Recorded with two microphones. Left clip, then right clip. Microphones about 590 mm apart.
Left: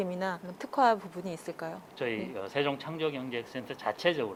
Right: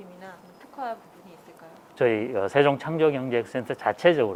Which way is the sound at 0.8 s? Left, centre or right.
Left.